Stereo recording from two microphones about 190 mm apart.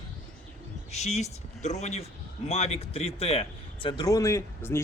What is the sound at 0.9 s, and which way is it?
Speech, 35° left (ahead or behind).